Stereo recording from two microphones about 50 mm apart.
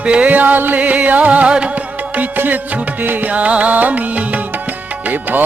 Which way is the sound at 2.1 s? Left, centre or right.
Right.